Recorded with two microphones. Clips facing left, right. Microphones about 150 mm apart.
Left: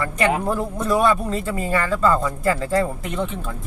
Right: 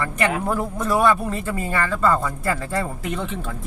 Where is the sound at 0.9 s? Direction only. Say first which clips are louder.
Even; 20° left (ahead or behind).